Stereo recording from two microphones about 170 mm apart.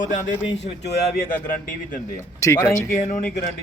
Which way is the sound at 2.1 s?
15° left (ahead or behind).